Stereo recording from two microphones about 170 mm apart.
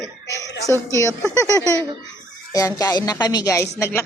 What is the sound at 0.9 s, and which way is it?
A woman's voice, 20° left (ahead or behind).